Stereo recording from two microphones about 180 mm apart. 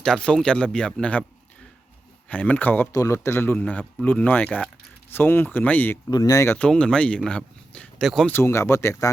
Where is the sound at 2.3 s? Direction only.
10° left (ahead or behind).